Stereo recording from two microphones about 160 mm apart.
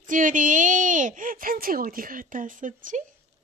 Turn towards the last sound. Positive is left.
turn(degrees=-55)  # may be behind; listen again after turning